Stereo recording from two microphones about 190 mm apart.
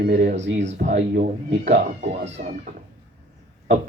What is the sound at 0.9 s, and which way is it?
Speech, 65° right (ahead or behind).